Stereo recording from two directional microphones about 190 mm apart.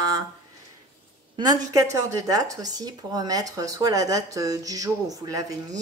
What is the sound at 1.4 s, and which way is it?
Speech, 20° right (ahead or behind).